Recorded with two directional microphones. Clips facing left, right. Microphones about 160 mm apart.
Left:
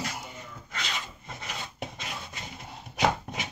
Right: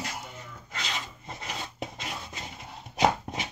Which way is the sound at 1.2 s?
35° right (ahead or behind).